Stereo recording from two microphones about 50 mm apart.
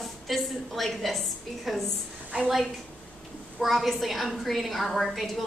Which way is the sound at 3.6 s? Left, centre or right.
Centre.